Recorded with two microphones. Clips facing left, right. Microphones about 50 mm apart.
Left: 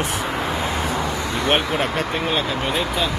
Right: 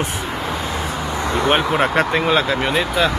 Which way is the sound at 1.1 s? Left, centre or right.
Right.